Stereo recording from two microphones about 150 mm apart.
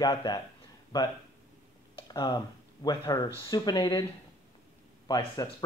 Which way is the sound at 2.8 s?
25° left (ahead or behind).